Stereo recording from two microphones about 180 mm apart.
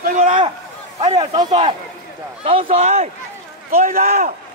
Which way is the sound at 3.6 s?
55° right (ahead or behind).